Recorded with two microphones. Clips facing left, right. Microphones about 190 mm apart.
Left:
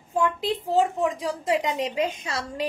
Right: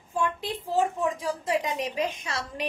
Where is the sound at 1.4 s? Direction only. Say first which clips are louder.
Left 4 dB; 25° left (ahead or behind).